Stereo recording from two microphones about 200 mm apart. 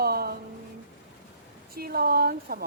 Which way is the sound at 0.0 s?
50° right (ahead or behind).